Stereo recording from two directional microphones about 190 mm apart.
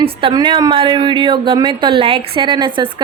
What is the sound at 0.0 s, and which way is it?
A woman's voice, 25° right (ahead or behind).